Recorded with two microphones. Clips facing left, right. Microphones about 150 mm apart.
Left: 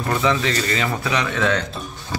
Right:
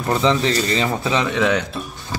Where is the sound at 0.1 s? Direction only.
30° right (ahead or behind).